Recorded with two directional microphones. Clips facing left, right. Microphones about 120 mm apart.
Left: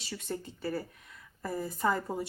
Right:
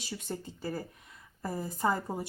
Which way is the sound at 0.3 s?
25° right (ahead or behind).